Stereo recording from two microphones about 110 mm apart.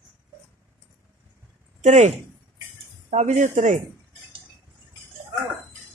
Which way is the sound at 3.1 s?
90° right.